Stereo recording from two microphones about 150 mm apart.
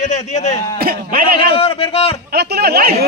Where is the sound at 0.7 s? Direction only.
90° right.